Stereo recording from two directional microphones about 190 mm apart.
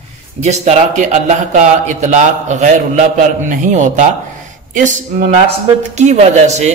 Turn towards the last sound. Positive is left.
turn(degrees=-35)  # may be behind; listen again after turning